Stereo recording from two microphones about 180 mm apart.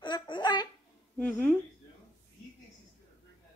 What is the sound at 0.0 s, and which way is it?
Babbling, 25° left (ahead or behind).